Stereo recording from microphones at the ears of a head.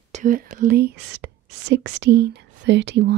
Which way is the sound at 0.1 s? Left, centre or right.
Right.